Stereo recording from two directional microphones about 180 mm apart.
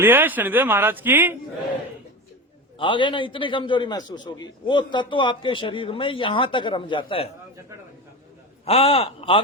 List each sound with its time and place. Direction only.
0.0 s speech: 10° right (ahead or behind)
2.7 s a man's voice: 25° left (ahead or behind)
8.6 s speech: 35° left (ahead or behind)